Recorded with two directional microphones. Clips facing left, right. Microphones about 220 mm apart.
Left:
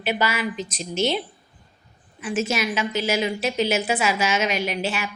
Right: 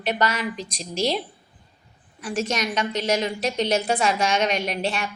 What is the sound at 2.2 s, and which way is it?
A woman's voice, 5° left (ahead or behind).